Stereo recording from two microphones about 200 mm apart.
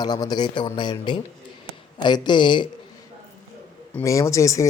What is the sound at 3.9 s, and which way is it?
Speech, 15° left (ahead or behind).